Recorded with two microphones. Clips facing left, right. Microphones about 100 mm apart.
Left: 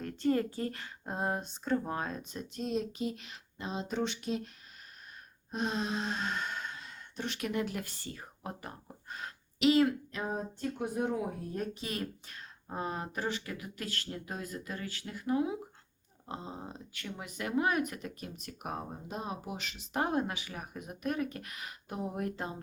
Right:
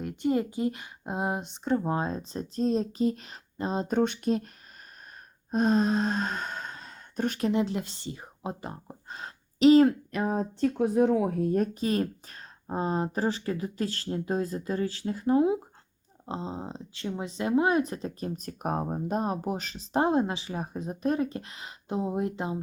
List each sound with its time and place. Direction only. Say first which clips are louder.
0.0 s speech: right 3 dB; 15° right (ahead or behind); by 4.4 s 45° right (ahead or behind)
5.5 s sigh: right 10 dB; 45° right (ahead or behind)
7.4 s speech: right 6 dB; 25° right (ahead or behind)
10.1 s speech: right 8 dB; 75° right (ahead or behind)
11.5 s speech: right 11 dB; 45° right (ahead or behind); by 22.6 s 20° right (ahead or behind)